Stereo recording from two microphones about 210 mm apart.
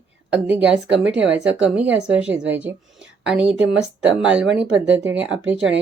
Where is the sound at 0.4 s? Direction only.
5° right (ahead or behind).